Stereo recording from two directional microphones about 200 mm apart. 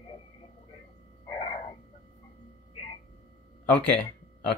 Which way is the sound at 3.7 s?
5° left (ahead or behind).